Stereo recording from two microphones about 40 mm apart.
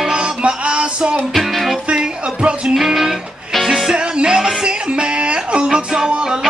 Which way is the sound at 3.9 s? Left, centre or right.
Right.